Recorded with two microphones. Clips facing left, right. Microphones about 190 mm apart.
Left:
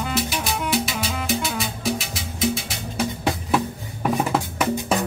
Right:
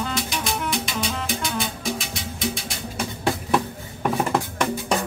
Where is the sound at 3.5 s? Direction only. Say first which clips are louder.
Even; 5° left (ahead or behind).